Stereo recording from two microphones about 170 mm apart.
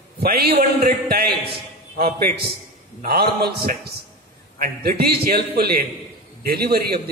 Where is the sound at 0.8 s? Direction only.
65° right (ahead or behind).